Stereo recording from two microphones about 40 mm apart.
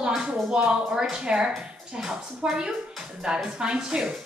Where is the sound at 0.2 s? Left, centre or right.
Right.